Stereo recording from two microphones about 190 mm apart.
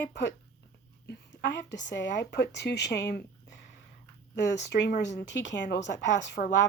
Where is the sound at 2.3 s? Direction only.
65° left (ahead or behind).